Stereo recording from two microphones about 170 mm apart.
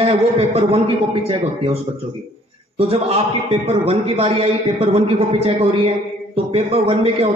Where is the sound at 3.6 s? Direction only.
35° right (ahead or behind).